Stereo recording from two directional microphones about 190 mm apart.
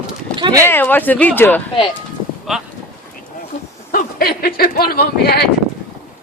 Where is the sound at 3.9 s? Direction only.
50° left (ahead or behind).